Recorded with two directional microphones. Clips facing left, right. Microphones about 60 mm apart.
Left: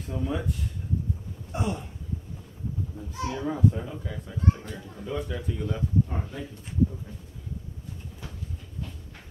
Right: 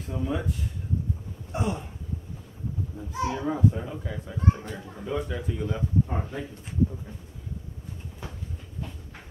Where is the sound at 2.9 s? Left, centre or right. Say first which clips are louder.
Right 5 dB; centre.